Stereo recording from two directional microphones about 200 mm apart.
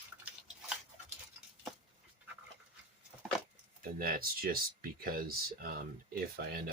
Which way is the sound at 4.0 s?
50° right (ahead or behind).